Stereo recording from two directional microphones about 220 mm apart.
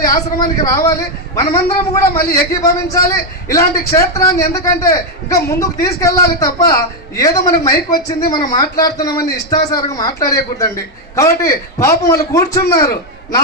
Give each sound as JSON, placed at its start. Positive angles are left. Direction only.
{"t": 0.0, "sound": "a man's voice", "side_deg": 15}